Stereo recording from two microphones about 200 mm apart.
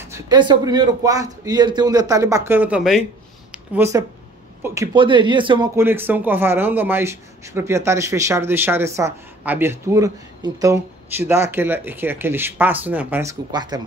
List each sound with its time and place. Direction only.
0.0 s a man's voice: 15° right (ahead or behind)
3.5 s a sound: 10° right (ahead or behind)
4.9 s speech: 25° right (ahead or behind)
5.8 s a man's voice: 10° right (ahead or behind)